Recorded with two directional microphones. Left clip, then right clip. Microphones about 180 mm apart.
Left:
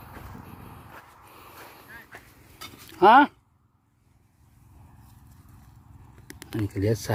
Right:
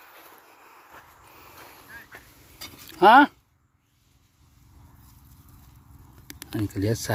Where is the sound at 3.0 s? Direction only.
15° right (ahead or behind).